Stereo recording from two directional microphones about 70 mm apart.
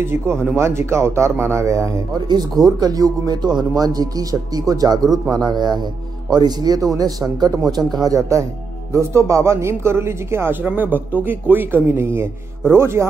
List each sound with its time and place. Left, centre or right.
0.0 s speech: right
2.1 s speech: right
10.6 s speech: right